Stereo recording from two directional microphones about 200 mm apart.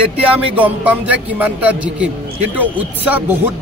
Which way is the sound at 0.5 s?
5° right (ahead or behind).